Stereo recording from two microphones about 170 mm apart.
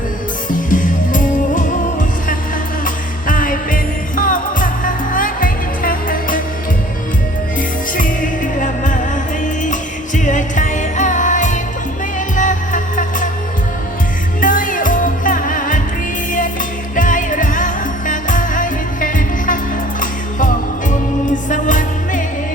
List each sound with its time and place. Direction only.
0.5 s music: 50° left (ahead or behind)
7.9 s music: 50° left (ahead or behind)
10.2 s music: 50° left (ahead or behind)
14.4 s music: 50° left (ahead or behind)
16.9 s music: 50° left (ahead or behind)
20.9 s music: 50° left (ahead or behind)